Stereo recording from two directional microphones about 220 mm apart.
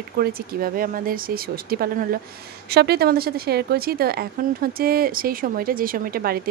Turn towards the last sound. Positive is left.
turn(degrees=-45)  # may be behind; listen again after turning